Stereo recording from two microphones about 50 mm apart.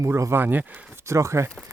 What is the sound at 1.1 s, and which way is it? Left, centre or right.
Speech, right.